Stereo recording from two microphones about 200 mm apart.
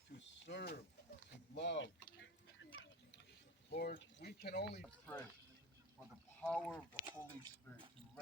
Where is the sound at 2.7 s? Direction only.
65° left (ahead or behind).